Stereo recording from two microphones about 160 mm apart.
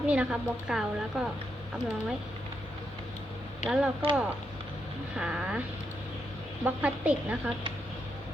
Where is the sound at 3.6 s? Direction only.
5° right (ahead or behind).